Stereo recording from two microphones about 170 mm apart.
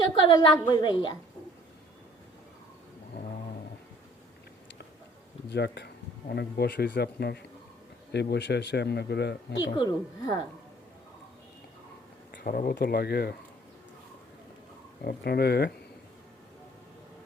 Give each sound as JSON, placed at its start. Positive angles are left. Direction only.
{"t": 0.3, "sound": "a woman's voice", "side_deg": 25}
{"t": 5.5, "sound": "speech", "side_deg": 85}
{"t": 8.1, "sound": "speech", "side_deg": 85}
{"t": 9.6, "sound": "a woman's voice", "side_deg": 25}
{"t": 12.3, "sound": "speech", "side_deg": 65}
{"t": 15.0, "sound": "speech", "side_deg": 65}